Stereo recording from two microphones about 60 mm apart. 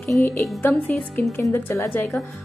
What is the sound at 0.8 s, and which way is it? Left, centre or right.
Speech, left.